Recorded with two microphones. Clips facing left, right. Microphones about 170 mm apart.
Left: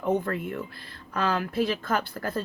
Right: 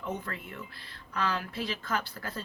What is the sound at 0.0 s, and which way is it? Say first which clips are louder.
Speech: left 11 dB; 55° left (ahead or behind).